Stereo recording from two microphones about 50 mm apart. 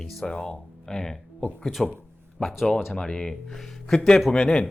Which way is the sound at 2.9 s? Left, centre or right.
Centre.